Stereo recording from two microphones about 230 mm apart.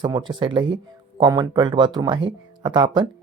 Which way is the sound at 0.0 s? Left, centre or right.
Centre.